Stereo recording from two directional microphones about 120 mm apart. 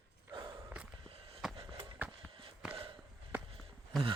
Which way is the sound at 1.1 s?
50° right (ahead or behind).